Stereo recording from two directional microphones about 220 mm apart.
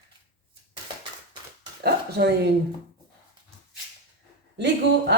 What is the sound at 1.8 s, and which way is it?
Speech, 45° right (ahead or behind).